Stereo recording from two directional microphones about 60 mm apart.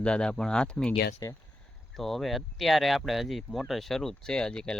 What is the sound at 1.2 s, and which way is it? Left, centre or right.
Speech, left.